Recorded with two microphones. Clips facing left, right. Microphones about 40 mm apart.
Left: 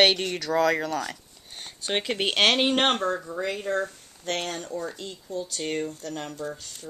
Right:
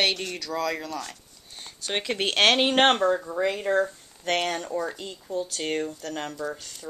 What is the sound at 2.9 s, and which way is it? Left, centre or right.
Speech, centre.